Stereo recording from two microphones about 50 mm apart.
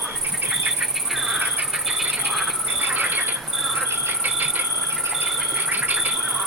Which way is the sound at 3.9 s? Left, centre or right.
Right.